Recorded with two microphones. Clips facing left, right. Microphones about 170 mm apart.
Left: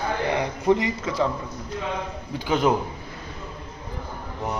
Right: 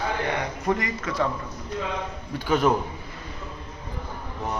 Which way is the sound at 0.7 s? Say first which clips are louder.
Left 5 dB; 25° left (ahead or behind).